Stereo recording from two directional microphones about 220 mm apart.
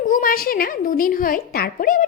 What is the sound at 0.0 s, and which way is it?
A woman's voice, 40° left (ahead or behind).